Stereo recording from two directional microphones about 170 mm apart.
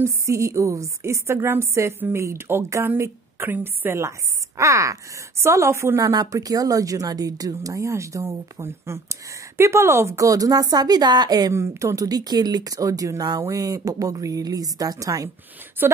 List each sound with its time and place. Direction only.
0.0 s a woman's voice: 15° right (ahead or behind)